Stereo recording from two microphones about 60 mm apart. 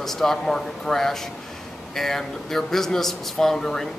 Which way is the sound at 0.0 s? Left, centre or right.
Centre.